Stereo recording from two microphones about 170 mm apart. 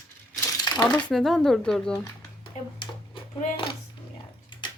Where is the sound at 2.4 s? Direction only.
30° left (ahead or behind).